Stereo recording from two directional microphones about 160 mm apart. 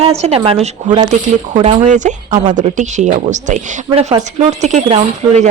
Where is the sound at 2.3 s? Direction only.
30° right (ahead or behind).